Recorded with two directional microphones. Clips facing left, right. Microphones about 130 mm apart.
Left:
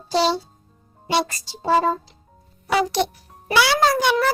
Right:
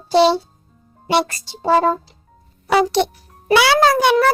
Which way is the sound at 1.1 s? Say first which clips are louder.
Right 4 dB; 60° right (ahead or behind).